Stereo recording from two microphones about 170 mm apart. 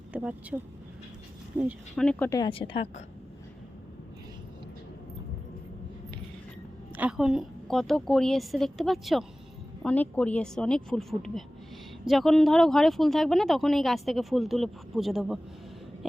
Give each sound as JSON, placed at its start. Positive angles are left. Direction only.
{"t": 0.1, "sound": "speech", "side_deg": -10}
{"t": 2.0, "sound": "speech", "side_deg": 5}
{"t": 2.4, "sound": "a woman's voice", "side_deg": 30}
{"t": 6.9, "sound": "speech", "side_deg": -5}